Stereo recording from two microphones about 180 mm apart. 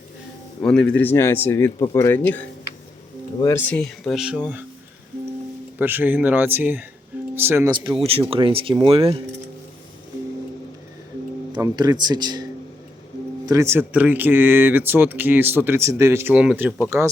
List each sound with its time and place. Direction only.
0.6 s speech: 5° left (ahead or behind)
3.4 s speech: 10° left (ahead or behind); by 4.6 s 10° right (ahead or behind)
5.8 s speech: 10° right (ahead or behind)
7.9 s speech: 30° right (ahead or behind)
11.5 s speech: 20° right (ahead or behind)